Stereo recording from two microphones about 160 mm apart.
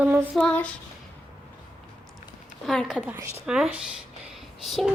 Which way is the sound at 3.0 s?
10° right (ahead or behind).